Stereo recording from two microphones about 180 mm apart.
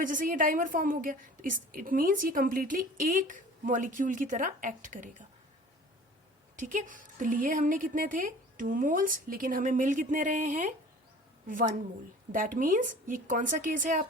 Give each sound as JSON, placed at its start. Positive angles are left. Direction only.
{"t": 0.0, "sound": "a woman's voice", "side_deg": -50}
{"t": 6.6, "sound": "a woman's voice", "side_deg": -45}